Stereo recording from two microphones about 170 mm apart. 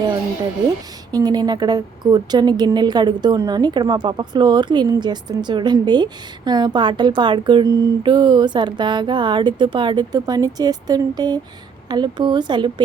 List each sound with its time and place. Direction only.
1.1 s a woman's voice: 25° right (ahead or behind)